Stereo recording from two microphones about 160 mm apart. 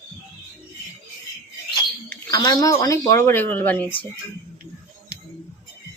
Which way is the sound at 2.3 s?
25° left (ahead or behind).